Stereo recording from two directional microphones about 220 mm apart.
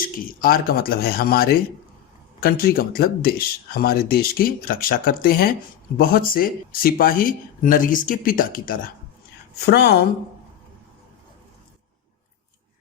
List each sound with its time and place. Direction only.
0.0 s speech: 40° left (ahead or behind)